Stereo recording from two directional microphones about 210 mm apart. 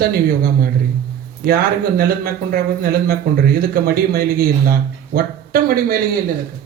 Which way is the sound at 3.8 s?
45° right (ahead or behind).